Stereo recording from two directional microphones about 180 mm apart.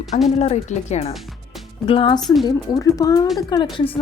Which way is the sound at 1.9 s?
30° left (ahead or behind).